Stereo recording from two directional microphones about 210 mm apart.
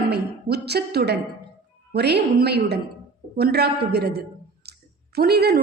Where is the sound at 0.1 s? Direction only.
50° right (ahead or behind).